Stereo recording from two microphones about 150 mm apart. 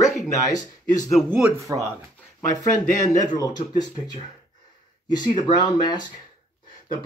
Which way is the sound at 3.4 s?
25° left (ahead or behind).